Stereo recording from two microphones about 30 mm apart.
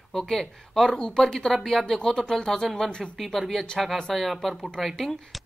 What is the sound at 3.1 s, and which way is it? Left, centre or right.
Speech, centre.